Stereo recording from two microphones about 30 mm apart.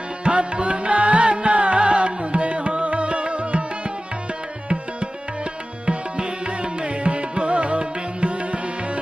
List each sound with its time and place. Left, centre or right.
0.3 s music: right
5.8 s music: right